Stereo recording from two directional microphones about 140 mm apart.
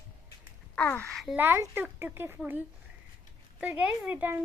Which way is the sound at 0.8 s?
15° left (ahead or behind).